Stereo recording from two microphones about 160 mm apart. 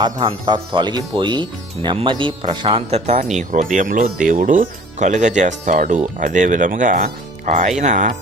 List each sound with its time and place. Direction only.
0.0 s speech: 30° right (ahead or behind)
3.3 s speech: 50° right (ahead or behind)